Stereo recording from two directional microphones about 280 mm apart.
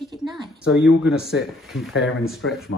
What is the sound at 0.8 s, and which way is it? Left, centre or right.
Speech, left.